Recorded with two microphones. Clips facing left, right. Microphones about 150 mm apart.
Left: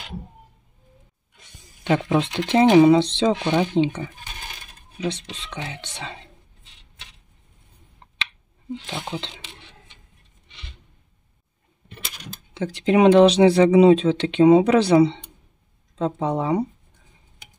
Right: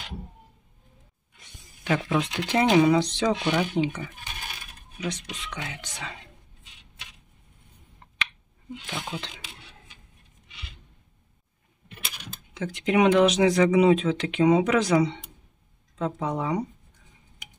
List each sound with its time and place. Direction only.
1.9 s speech: 25° left (ahead or behind)
8.9 s speech: 25° left (ahead or behind)
12.5 s speech: 30° left (ahead or behind)